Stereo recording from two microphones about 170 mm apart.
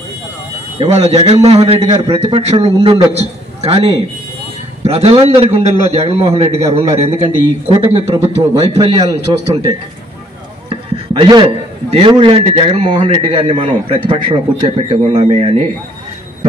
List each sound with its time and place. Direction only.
0.7 s a man's voice: 40° right (ahead or behind)
10.7 s chopping: 30° right (ahead or behind)
11.9 s a man's voice: 30° right (ahead or behind)